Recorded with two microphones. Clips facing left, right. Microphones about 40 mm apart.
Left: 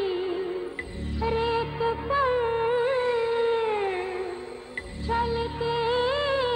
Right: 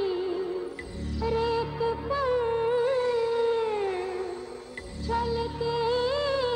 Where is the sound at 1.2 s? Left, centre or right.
Left.